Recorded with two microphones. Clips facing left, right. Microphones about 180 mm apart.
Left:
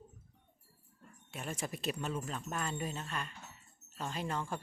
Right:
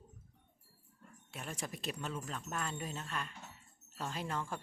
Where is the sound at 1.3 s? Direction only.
Centre (ahead or behind).